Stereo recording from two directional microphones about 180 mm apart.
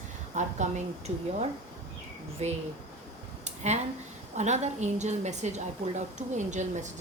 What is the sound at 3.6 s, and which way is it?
A woman's voice, 40° right (ahead or behind).